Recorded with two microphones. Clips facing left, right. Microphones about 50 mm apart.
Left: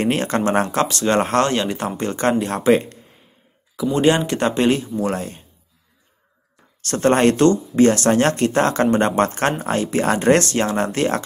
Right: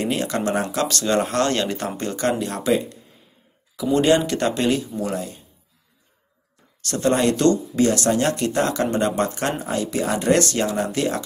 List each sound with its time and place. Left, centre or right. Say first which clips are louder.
0.0 s speech: left 4 dB; left
0.8 s speech: left 3 dB; left
1.1 s speech: left 3 dB; left
1.5 s speech: left 2 dB; centre
2.0 s speech: left 4 dB; left
4.3 s speech: left 3 dB; left
5.0 s speech: left 3 dB; left
6.8 s speech: left 4 dB; left
7.4 s speech: left 4 dB; left